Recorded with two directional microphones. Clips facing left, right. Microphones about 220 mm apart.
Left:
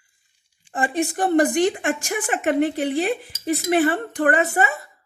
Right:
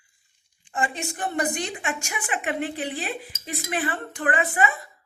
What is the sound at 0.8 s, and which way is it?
A woman's voice, 45° left (ahead or behind).